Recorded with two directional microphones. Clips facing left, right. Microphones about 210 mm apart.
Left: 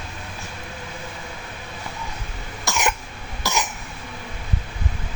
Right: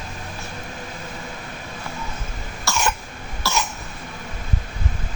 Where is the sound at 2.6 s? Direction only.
15° left (ahead or behind).